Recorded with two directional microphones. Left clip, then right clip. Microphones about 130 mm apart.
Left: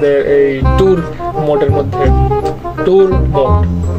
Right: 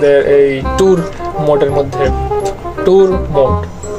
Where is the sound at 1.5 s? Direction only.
10° left (ahead or behind).